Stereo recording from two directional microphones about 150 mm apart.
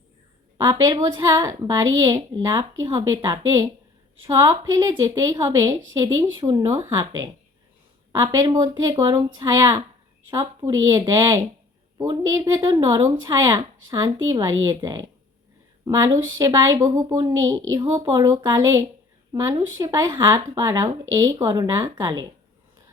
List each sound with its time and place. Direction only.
0.6 s a woman's voice: 25° right (ahead or behind)